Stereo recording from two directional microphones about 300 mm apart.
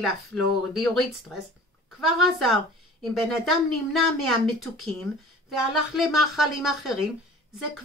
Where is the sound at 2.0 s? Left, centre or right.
Centre.